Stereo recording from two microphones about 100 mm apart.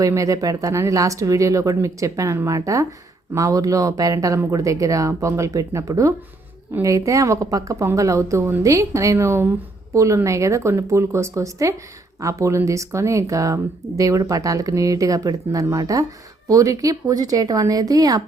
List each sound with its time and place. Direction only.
0.0 s a woman's voice: 35° right (ahead or behind)